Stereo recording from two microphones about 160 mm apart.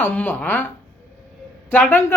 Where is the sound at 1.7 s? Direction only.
10° left (ahead or behind).